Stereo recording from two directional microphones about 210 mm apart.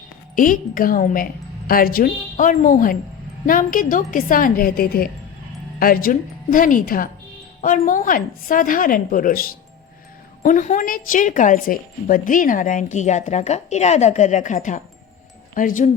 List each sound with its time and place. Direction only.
0.3 s a woman's voice: 40° left (ahead or behind)
10.4 s a woman's voice: 40° left (ahead or behind)